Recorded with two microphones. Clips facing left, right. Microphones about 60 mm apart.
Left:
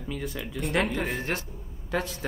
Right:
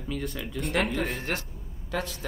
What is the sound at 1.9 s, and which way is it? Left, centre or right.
Speech, left.